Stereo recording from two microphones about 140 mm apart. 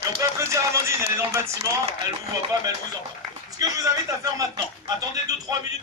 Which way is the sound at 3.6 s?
25° right (ahead or behind).